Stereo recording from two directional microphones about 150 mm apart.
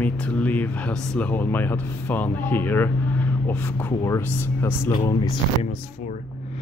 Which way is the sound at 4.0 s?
20° left (ahead or behind).